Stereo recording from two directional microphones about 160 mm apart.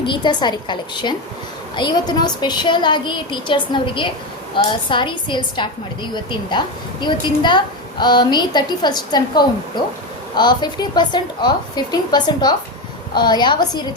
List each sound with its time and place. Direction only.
0.0 s a woman's voice: 30° left (ahead or behind)